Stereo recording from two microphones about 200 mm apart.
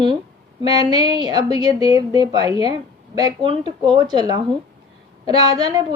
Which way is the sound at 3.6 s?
30° left (ahead or behind).